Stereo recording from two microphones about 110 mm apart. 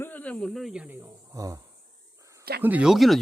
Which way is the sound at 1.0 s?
30° right (ahead or behind).